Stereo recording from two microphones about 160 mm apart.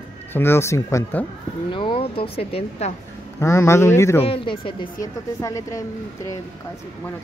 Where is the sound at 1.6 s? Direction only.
30° left (ahead or behind).